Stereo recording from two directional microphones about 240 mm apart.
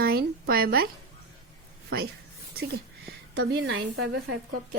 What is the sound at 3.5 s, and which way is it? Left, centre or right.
Speech, right.